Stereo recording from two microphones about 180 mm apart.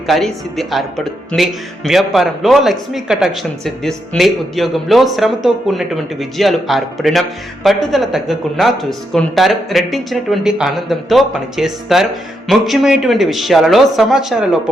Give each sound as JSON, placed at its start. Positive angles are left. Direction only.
{"t": 0.1, "sound": "speech", "side_deg": 0}